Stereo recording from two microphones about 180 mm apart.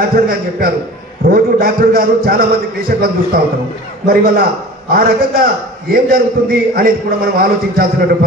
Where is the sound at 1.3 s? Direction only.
55° right (ahead or behind).